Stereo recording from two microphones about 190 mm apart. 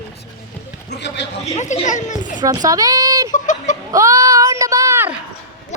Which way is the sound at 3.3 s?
40° left (ahead or behind).